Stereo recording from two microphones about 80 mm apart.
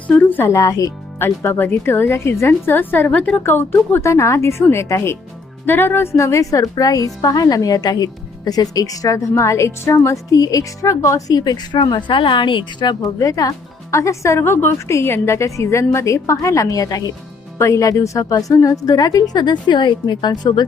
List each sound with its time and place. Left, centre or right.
0.3 s speech: left
1.2 s a woman's voice: left
3.1 s a woman's voice: centre
3.4 s a woman's voice: left
10.3 s speech: left
13.1 s a woman's voice: left